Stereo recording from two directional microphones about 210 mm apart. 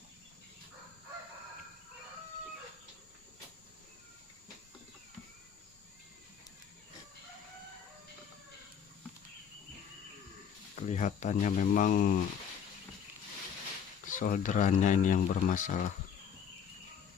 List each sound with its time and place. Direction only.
10.8 s speech: 35° left (ahead or behind)
14.1 s speech: 40° left (ahead or behind)